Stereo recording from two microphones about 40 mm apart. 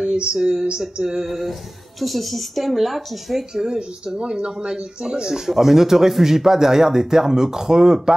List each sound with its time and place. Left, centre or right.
0.0 s speech: right